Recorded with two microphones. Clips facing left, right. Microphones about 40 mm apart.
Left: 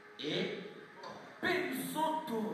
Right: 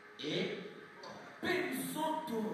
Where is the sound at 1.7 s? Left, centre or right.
Left.